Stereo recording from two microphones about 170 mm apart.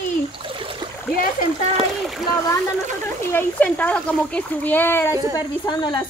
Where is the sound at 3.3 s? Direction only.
10° left (ahead or behind).